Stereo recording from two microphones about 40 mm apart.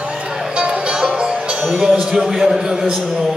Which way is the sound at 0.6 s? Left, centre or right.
Right.